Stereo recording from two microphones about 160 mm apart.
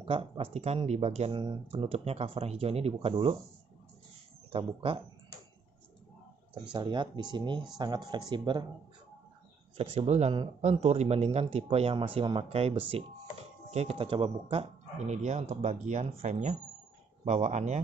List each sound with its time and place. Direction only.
0.0 s speech: 35° right (ahead or behind)
4.5 s speech: 35° right (ahead or behind)
6.7 s speech: 30° right (ahead or behind)
9.8 s speech: 40° right (ahead or behind)